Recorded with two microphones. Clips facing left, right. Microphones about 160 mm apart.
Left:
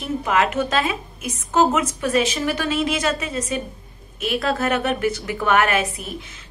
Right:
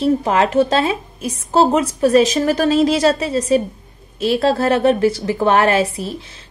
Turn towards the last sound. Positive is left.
turn(degrees=-30)  # may be behind; listen again after turning